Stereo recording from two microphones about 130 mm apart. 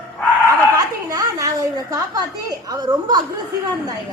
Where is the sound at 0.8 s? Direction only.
30° right (ahead or behind).